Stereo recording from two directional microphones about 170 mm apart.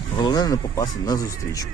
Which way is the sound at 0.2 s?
25° left (ahead or behind).